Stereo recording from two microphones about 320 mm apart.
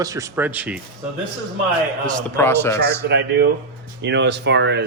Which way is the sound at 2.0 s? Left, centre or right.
Centre.